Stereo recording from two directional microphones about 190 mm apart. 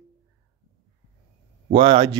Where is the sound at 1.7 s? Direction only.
25° right (ahead or behind).